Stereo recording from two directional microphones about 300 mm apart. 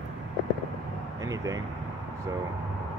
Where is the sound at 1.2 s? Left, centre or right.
Centre.